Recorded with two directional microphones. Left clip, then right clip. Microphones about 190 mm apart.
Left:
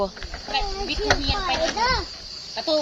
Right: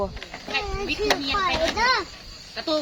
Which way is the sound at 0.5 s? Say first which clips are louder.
Left 1 dB; 5° right (ahead or behind).